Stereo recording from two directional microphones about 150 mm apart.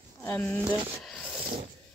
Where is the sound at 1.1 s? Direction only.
5° right (ahead or behind).